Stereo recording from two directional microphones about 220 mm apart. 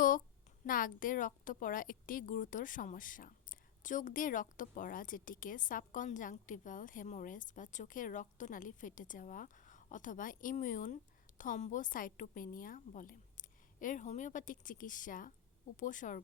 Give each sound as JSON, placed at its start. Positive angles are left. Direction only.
{"t": 0.6, "sound": "a woman's voice", "side_deg": 40}